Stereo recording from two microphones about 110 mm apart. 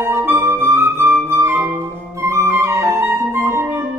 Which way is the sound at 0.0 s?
20° right (ahead or behind).